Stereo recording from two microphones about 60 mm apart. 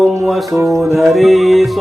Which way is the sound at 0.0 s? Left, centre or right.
Centre.